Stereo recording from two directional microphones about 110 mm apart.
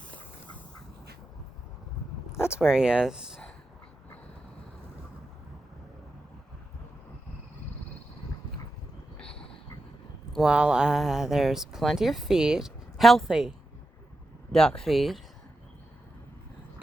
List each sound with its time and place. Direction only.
2.5 s speech: 5° right (ahead or behind)
9.3 s a sound: 60° left (ahead or behind)
10.3 s speech: 5° right (ahead or behind)
14.5 s speech: 5° left (ahead or behind)